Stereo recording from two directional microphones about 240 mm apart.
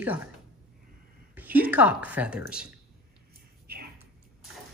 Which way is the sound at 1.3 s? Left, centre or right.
Centre.